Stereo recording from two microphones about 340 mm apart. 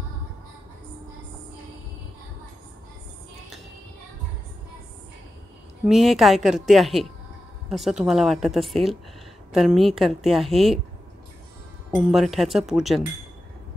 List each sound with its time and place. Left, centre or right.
5.9 s a woman's voice: centre
11.9 s a woman's voice: centre